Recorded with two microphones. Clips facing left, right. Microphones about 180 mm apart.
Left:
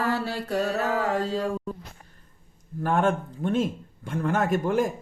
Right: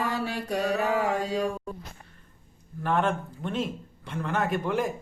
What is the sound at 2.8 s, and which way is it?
A man's voice, 45° left (ahead or behind).